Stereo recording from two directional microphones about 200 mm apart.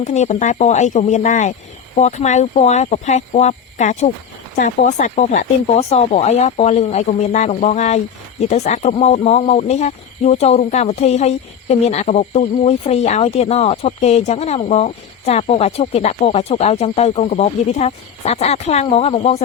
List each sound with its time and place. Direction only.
0.0 s speech: 35° left (ahead or behind)